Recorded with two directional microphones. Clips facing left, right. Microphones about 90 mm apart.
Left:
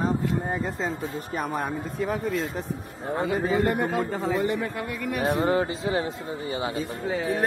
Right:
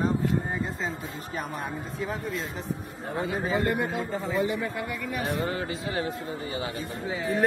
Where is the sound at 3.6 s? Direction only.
55° left (ahead or behind).